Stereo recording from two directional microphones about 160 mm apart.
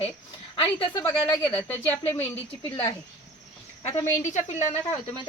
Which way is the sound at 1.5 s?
10° left (ahead or behind).